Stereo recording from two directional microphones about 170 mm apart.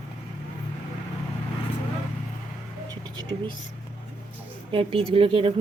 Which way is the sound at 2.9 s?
25° right (ahead or behind).